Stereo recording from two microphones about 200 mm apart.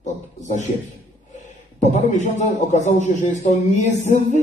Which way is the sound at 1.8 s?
35° left (ahead or behind).